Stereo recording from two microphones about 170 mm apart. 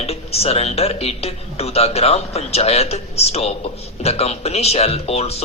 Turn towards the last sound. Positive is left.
turn(degrees=40)  # may be behind; listen again after turning